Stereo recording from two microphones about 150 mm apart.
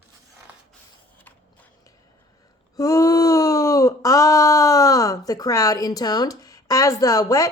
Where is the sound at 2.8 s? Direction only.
25° left (ahead or behind).